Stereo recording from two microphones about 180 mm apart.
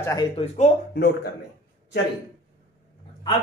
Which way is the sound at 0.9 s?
60° left (ahead or behind).